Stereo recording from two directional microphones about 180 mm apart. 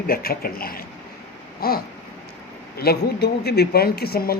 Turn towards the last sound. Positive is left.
turn(degrees=60)  # may be behind; listen again after turning